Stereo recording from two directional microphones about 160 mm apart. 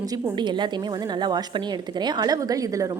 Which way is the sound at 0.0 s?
25° right (ahead or behind).